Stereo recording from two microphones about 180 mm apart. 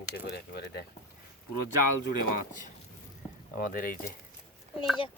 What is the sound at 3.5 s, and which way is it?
Speech, 50° left (ahead or behind).